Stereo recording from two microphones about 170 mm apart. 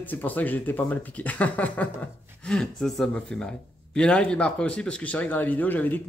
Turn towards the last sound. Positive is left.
turn(degrees=10)  # may be behind; listen again after turning